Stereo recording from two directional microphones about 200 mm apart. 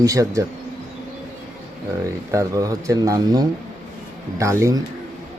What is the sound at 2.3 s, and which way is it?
Speech, 15° right (ahead or behind).